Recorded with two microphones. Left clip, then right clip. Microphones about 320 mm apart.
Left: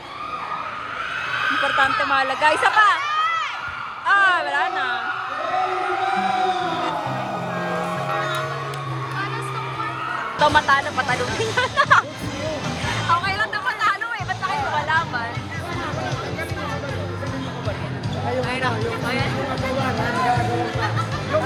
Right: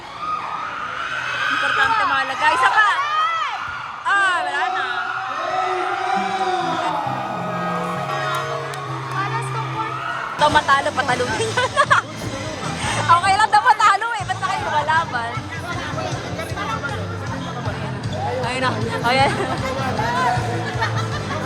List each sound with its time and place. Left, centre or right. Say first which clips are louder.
1.9 s speech: right 3 dB; right
2.1 s speech: right 1 dB; centre
3.0 s crowd: right 2 dB; right
4.0 s a sound: left 1 dB; centre
7.6 s music: right 1 dB; centre
10.4 s speech: right 1 dB; centre
13.1 s music: right 7 dB; centre
18.4 s music: right 1 dB; centre